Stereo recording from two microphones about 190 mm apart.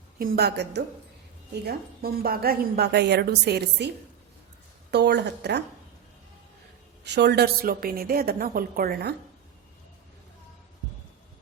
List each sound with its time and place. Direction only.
0.2 s a woman's voice: 55° right (ahead or behind)
4.9 s a woman's voice: 60° right (ahead or behind)
7.0 s a woman's voice: 65° right (ahead or behind)